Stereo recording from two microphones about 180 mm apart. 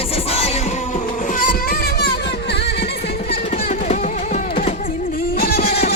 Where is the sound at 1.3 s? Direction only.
50° left (ahead or behind).